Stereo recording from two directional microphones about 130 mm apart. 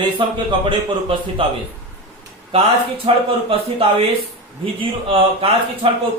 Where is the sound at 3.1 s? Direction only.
50° right (ahead or behind).